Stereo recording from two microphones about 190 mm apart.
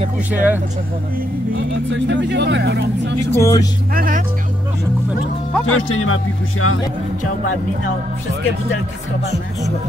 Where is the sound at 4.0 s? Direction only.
45° right (ahead or behind).